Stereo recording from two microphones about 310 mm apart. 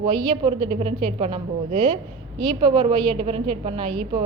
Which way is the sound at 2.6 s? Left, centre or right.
Centre.